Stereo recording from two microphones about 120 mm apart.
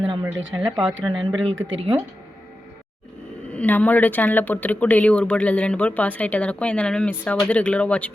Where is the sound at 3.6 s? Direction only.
15° left (ahead or behind).